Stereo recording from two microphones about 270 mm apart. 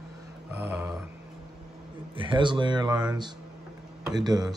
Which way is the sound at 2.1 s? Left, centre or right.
Centre.